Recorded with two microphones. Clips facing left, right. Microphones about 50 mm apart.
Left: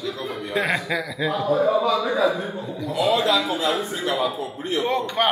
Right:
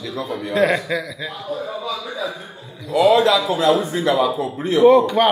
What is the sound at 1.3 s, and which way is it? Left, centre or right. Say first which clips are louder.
Speech: left 9 dB; left.